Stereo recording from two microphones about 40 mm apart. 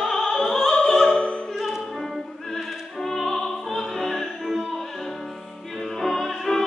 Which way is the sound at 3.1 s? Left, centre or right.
Centre.